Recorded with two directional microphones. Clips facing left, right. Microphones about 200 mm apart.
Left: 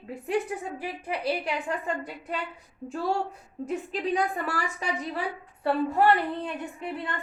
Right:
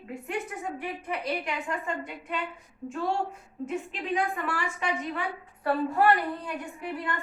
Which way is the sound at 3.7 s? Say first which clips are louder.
Left 3 dB; 40° left (ahead or behind).